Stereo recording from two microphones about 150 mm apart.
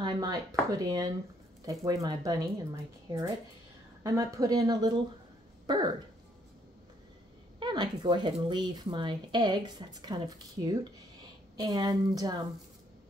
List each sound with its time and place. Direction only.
0.0 s speech: 25° right (ahead or behind)
7.5 s speech: 30° right (ahead or behind)